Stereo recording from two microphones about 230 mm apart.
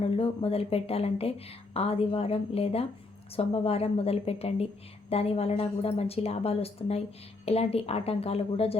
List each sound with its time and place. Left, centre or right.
0.0 s a woman's voice: left